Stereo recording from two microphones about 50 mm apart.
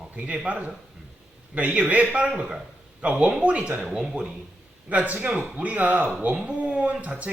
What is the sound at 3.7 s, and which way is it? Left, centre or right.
Speech, centre.